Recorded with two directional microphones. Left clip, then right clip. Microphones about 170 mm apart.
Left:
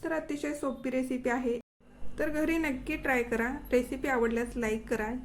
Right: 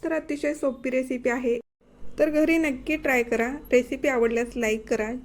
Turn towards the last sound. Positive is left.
turn(degrees=-25)  # may be behind; listen again after turning